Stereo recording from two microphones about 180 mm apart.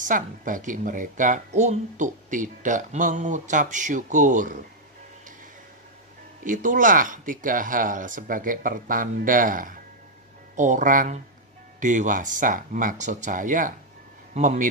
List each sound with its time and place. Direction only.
0.0 s speech: 45° right (ahead or behind)
6.4 s speech: 45° right (ahead or behind)